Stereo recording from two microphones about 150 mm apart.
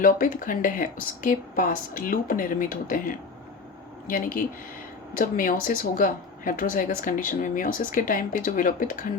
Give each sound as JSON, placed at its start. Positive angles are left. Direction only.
{"t": 0.0, "sound": "a woman's voice", "side_deg": 65}